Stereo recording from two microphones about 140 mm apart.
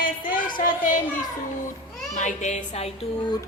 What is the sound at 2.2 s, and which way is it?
Speech, 60° left (ahead or behind).